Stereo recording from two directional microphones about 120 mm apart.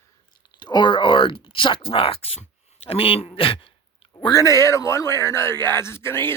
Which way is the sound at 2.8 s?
55° left (ahead or behind).